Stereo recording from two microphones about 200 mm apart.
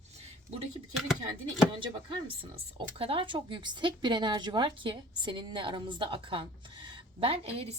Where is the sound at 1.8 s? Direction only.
25° right (ahead or behind).